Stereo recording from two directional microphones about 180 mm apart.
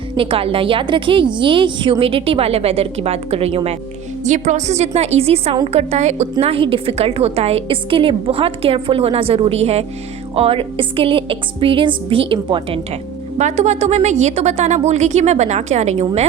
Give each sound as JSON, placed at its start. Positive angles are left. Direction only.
{"t": 0.2, "sound": "a woman's voice", "side_deg": -30}